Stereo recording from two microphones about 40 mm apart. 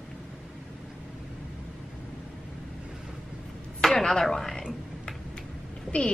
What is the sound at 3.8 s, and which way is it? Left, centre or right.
Chopping, centre.